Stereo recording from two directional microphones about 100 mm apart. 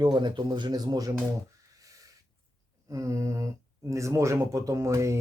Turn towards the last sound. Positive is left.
turn(degrees=-30)  # may be behind; listen again after turning